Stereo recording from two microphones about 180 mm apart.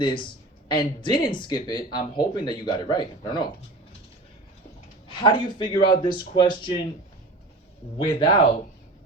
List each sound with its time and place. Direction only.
0.0 s speech: 25° left (ahead or behind)
5.0 s speech: 25° left (ahead or behind)
7.9 s speech: 25° left (ahead or behind)